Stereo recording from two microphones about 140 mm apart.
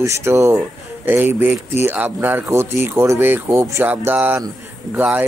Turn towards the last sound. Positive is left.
turn(degrees=-10)  # may be behind; listen again after turning